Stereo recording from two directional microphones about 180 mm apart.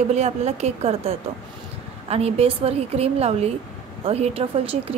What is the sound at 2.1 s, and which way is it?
A woman's voice, 35° right (ahead or behind).